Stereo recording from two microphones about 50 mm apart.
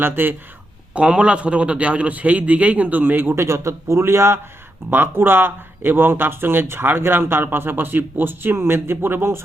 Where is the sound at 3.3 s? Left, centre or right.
Right.